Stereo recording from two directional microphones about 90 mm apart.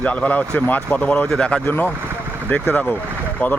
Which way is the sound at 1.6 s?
25° left (ahead or behind).